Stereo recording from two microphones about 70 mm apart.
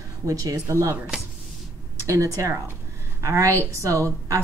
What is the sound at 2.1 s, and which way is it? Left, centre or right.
Speech, right.